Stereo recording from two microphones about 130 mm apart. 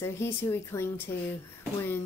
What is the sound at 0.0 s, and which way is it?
Speech, 20° left (ahead or behind).